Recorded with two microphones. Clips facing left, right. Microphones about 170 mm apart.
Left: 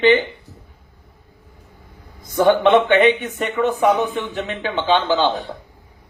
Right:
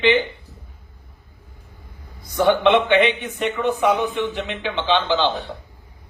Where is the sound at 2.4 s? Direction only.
45° left (ahead or behind).